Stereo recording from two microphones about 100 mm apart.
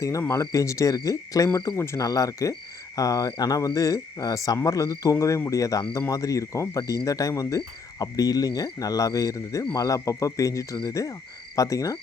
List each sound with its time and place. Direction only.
0.0 s frog: 30° left (ahead or behind)